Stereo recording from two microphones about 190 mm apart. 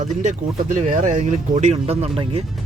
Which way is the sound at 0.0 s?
40° right (ahead or behind).